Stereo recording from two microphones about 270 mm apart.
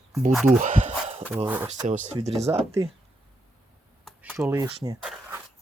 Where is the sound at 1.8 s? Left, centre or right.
Right.